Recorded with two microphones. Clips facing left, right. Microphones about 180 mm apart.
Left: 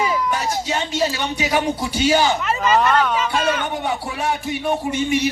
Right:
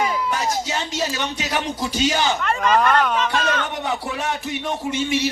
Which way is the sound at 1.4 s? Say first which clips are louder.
Left 7 dB; 10° left (ahead or behind).